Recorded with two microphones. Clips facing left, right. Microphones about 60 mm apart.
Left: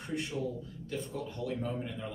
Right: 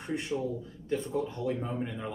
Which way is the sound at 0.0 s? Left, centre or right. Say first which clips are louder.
Right 3 dB; right.